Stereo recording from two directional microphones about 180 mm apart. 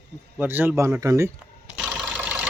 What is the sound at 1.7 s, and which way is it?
Engine, 5° right (ahead or behind).